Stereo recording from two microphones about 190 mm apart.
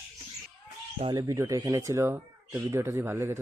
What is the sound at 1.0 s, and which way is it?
Speech, 20° right (ahead or behind).